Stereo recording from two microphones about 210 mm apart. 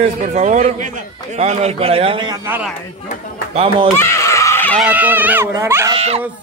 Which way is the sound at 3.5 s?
25° right (ahead or behind).